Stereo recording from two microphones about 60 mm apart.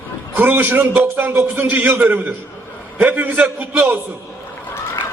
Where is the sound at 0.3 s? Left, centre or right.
Right.